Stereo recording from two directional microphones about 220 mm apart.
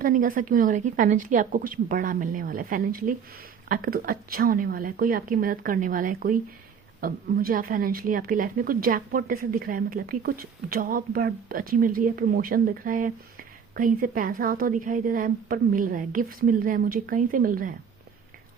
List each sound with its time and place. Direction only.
0.0 s a woman's voice: 40° right (ahead or behind)